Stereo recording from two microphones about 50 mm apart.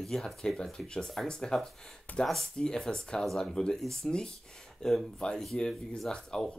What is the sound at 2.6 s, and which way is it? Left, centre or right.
Speech, centre.